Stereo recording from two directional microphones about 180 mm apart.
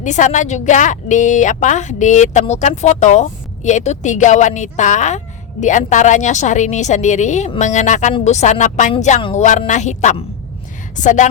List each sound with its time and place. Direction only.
0.0 s a woman's voice: 45° left (ahead or behind)